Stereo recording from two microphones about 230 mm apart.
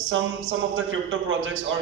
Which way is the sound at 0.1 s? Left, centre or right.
Right.